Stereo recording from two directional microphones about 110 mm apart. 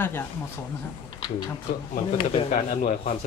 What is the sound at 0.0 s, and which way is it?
Speech, 20° left (ahead or behind).